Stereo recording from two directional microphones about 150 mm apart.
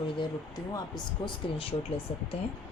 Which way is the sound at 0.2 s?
25° left (ahead or behind).